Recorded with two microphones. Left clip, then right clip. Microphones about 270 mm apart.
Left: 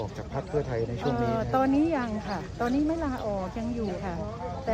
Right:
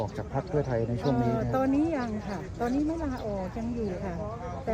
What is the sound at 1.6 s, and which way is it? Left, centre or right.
Speech, centre.